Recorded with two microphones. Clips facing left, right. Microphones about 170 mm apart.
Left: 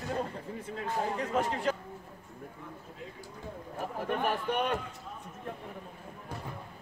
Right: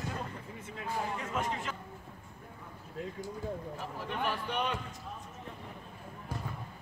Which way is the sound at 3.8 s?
50° left (ahead or behind).